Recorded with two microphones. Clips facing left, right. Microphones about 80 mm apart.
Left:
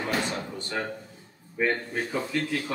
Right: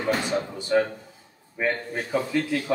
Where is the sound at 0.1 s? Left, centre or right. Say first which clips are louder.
Right 8 dB; centre.